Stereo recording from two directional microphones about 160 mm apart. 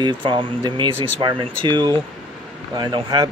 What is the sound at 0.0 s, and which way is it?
Speech, 30° right (ahead or behind).